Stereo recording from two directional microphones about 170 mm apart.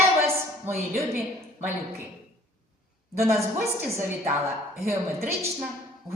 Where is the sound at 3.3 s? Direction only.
15° right (ahead or behind).